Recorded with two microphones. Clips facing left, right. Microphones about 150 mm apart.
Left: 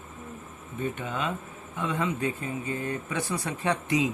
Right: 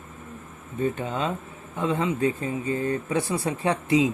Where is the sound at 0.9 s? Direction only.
30° right (ahead or behind).